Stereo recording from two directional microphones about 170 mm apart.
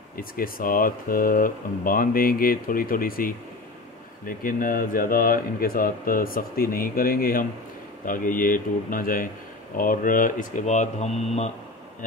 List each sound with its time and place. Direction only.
0.2 s speech: 55° left (ahead or behind)
4.4 s speech: 55° left (ahead or behind); by 11.5 s 40° left (ahead or behind)